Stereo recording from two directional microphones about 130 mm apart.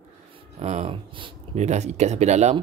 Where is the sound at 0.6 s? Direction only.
55° right (ahead or behind).